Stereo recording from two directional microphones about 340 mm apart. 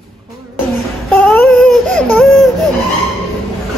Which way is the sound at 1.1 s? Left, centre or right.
Centre.